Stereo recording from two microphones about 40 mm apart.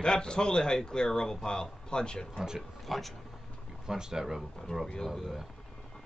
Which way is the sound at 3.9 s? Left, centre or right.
Centre.